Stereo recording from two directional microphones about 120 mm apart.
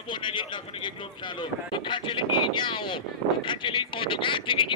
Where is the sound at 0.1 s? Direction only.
40° left (ahead or behind).